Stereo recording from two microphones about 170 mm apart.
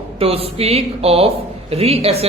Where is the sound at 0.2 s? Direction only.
35° right (ahead or behind).